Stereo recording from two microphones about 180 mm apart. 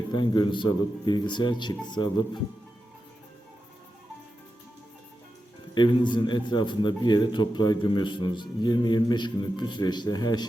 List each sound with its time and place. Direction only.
0.1 s a man's voice: 25° left (ahead or behind)
5.7 s a man's voice: 25° left (ahead or behind)